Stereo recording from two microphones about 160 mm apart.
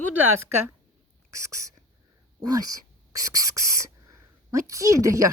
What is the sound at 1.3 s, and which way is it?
Speech, 20° right (ahead or behind).